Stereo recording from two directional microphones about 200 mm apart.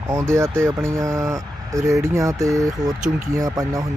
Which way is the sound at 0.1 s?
15° right (ahead or behind).